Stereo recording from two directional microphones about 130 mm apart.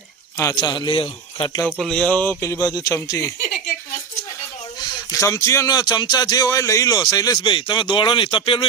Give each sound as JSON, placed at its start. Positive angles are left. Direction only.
{"t": 0.3, "sound": "speech", "side_deg": 25}
{"t": 1.8, "sound": "speech", "side_deg": 5}
{"t": 2.4, "sound": "speech", "side_deg": 25}
{"t": 4.8, "sound": "speech", "side_deg": 30}